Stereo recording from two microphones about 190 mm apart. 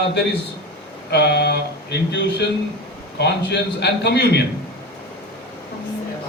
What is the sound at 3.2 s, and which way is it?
A woman's voice, 60° left (ahead or behind).